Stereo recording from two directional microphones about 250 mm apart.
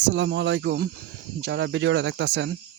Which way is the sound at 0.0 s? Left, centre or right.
Right.